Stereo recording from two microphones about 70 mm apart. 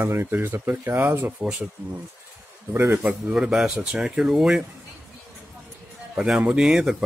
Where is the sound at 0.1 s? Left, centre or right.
Right.